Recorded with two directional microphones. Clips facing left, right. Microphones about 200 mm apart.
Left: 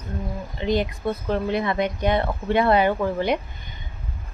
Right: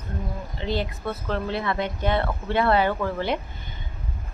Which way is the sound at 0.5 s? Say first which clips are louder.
Left 5 dB; 15° left (ahead or behind).